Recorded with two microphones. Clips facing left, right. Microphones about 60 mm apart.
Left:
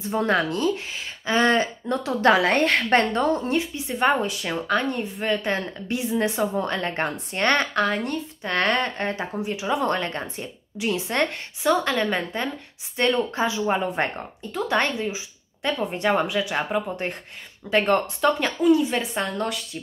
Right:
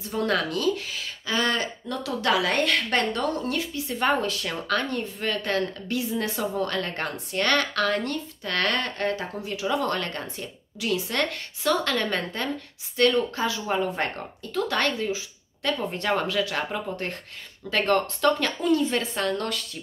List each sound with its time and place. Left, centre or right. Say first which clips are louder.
0.0 s a woman's voice: left 3 dB; left